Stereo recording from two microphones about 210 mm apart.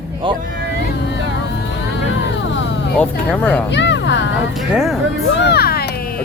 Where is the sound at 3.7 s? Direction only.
55° left (ahead or behind).